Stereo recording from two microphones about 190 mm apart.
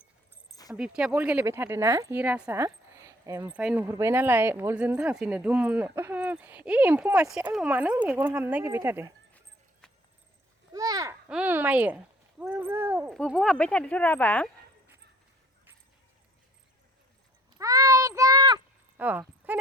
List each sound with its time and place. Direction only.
0.7 s speech: 5° right (ahead or behind)
10.7 s a sound: 20° right (ahead or behind)
11.3 s speech: 5° right (ahead or behind)
13.1 s speech: centre (ahead or behind)
17.6 s a sound: 20° right (ahead or behind)
18.9 s speech: 10° right (ahead or behind)
19.5 s horse: 10° right (ahead or behind)